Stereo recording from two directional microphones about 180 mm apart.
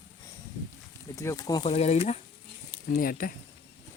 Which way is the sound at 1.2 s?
20° left (ahead or behind).